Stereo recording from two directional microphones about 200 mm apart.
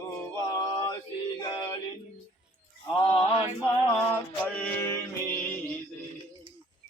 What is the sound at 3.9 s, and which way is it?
Music, 10° left (ahead or behind).